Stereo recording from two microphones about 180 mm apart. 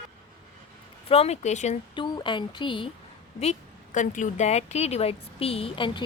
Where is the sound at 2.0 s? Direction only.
25° left (ahead or behind).